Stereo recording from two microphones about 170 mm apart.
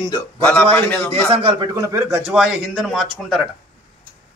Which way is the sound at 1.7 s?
15° right (ahead or behind).